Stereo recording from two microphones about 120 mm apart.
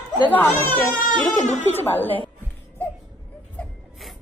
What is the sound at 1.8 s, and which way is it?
Speech, 15° left (ahead or behind).